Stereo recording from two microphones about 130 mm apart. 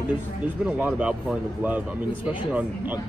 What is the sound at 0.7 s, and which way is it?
Speech, 10° right (ahead or behind).